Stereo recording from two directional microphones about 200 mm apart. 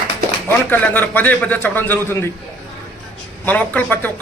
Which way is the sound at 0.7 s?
10° left (ahead or behind).